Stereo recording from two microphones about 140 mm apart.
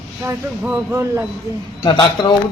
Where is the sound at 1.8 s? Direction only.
35° left (ahead or behind).